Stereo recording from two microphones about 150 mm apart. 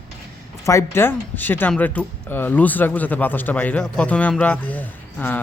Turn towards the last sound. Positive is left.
turn(degrees=10)  # may be behind; listen again after turning